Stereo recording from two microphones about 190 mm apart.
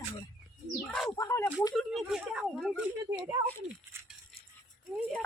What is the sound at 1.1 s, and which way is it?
Speech, 15° left (ahead or behind).